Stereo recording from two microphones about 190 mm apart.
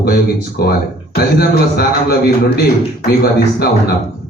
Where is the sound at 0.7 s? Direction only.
55° left (ahead or behind).